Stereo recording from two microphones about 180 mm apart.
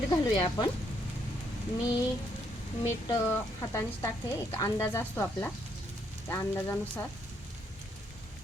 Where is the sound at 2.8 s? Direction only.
15° left (ahead or behind).